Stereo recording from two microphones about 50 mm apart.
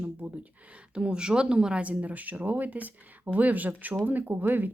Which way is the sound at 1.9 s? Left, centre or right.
Right.